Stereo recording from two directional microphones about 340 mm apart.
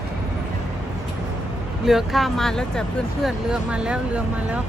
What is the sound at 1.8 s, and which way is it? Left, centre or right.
Speech, centre.